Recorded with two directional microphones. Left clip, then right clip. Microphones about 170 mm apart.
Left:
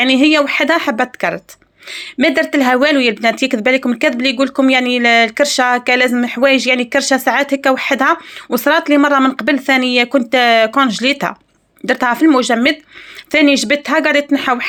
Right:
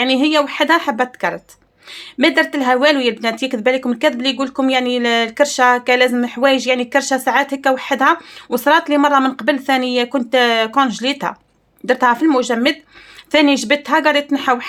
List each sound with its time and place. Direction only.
0.0 s speech: 20° left (ahead or behind)